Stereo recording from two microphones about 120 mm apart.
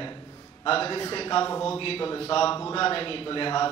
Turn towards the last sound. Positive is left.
turn(degrees=45)  # may be behind; listen again after turning